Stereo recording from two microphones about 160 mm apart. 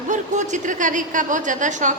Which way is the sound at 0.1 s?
50° right (ahead or behind).